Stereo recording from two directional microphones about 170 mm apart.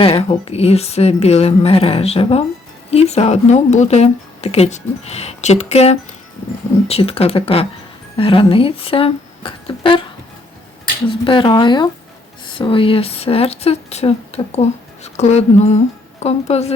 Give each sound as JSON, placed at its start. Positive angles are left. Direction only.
{"t": 0.0, "sound": "speech", "side_deg": 35}
{"t": 11.1, "sound": "speech", "side_deg": 30}